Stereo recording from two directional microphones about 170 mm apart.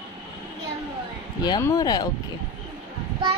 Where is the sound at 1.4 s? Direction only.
20° left (ahead or behind).